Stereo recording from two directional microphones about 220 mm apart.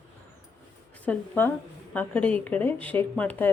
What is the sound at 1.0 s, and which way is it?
A woman's voice, 10° left (ahead or behind).